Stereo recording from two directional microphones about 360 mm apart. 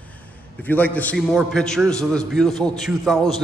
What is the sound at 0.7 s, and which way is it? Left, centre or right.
A man's voice, centre.